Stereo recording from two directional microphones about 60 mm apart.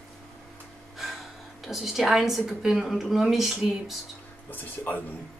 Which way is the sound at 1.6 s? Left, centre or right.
Centre.